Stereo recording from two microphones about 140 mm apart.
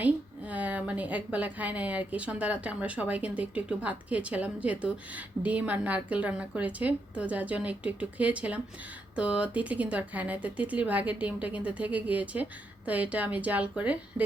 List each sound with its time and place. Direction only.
0.0 s a woman's voice: 10° right (ahead or behind)